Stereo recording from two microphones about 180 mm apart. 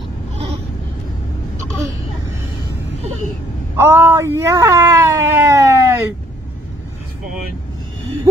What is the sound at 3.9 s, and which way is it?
Speech, 15° right (ahead or behind).